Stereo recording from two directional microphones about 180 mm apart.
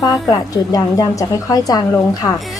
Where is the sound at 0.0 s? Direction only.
20° left (ahead or behind).